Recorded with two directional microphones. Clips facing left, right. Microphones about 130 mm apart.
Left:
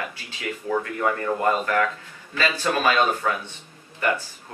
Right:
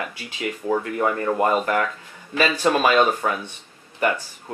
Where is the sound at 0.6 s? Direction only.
30° right (ahead or behind).